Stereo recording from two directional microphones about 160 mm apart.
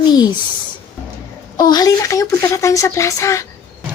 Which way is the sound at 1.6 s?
25° left (ahead or behind).